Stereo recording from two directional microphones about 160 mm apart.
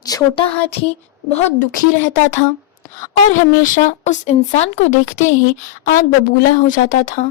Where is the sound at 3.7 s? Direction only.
50° left (ahead or behind).